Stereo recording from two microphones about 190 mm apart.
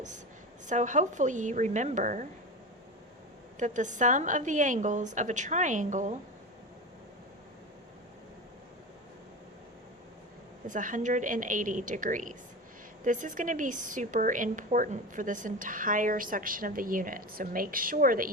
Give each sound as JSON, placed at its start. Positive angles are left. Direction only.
{"t": 0.7, "sound": "a woman's voice", "side_deg": -40}
{"t": 3.6, "sound": "a woman's voice", "side_deg": -40}
{"t": 10.7, "sound": "a woman's voice", "side_deg": -45}